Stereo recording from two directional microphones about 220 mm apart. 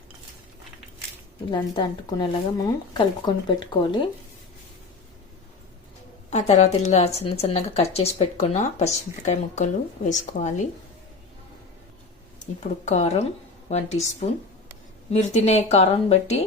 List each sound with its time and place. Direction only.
1.5 s speech: 20° left (ahead or behind)
6.3 s speech: 30° left (ahead or behind)
12.5 s speech: 30° left (ahead or behind)